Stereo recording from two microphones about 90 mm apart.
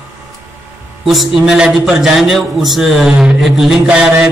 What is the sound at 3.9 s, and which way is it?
Mantra, 15° right (ahead or behind).